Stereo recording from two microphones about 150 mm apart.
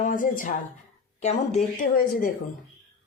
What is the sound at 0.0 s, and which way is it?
Speech, 65° left (ahead or behind).